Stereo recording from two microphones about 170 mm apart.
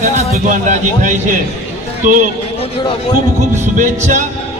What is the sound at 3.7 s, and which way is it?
Music, 45° right (ahead or behind).